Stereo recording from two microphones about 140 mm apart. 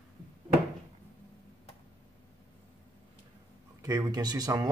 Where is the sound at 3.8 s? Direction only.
25° right (ahead or behind).